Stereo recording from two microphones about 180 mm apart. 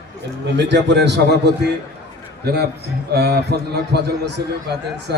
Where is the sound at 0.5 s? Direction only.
75° right (ahead or behind).